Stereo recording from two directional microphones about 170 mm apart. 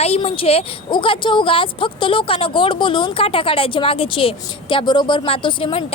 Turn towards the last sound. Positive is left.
turn(degrees=30)  # may be behind; listen again after turning